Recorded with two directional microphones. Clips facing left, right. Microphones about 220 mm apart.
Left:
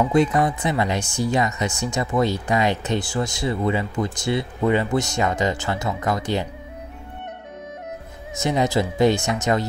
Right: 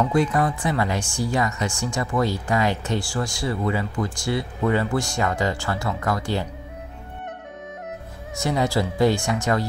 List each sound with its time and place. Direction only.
0.1 s speech: 20° left (ahead or behind)
8.4 s speech: 20° left (ahead or behind)